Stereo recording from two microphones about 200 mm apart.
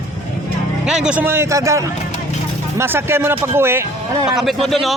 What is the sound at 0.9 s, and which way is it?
Speech, 5° right (ahead or behind).